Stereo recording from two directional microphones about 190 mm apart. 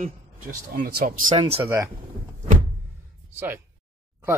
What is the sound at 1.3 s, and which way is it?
Speech, 30° right (ahead or behind).